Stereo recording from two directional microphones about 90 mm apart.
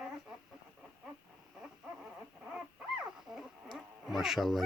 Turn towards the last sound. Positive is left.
turn(degrees=0)  # may be behind; listen again after turning